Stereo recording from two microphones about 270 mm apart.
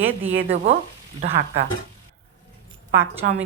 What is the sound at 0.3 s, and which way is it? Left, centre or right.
Speech, right.